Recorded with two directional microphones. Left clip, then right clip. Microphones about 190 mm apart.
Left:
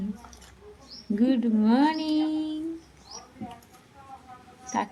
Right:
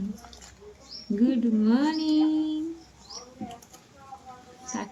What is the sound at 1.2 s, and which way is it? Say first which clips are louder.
Speech: even; 50° left (ahead or behind).